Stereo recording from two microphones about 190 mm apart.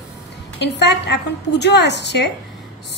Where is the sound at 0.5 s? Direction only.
65° left (ahead or behind).